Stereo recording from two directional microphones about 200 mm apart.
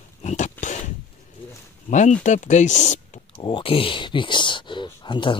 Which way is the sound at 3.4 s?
25° left (ahead or behind).